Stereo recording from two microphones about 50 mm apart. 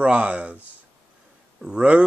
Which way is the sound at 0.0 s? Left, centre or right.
Right.